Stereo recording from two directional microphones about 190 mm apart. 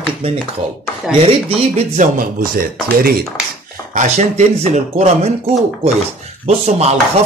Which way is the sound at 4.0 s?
35° right (ahead or behind).